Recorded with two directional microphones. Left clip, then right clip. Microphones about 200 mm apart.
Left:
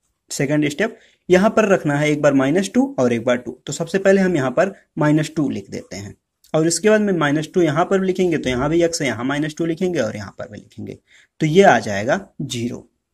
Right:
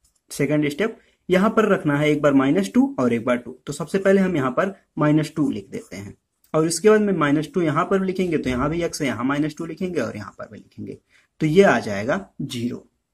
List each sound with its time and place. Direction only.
0.3 s speech: 20° left (ahead or behind)